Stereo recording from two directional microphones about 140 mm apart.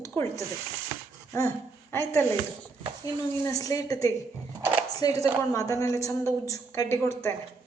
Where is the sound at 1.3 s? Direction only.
20° left (ahead or behind).